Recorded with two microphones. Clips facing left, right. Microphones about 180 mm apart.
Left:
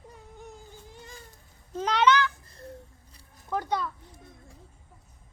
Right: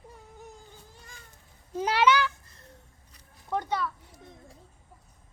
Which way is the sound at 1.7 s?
10° right (ahead or behind).